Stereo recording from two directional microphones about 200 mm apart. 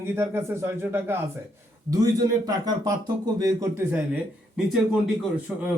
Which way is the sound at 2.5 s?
20° right (ahead or behind).